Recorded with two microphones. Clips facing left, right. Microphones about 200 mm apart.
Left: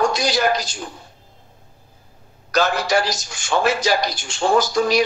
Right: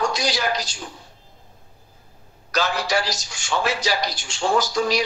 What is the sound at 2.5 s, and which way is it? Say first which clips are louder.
A man's voice: left 4 dB; 50° left (ahead or behind).